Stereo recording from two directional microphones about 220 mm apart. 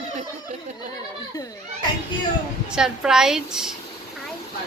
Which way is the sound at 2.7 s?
5° right (ahead or behind).